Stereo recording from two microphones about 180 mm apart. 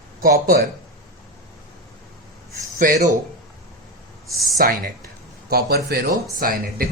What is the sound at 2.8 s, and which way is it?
Speech, 45° right (ahead or behind).